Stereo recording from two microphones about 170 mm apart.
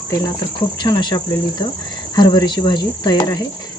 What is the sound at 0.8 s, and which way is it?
Speech, 25° left (ahead or behind).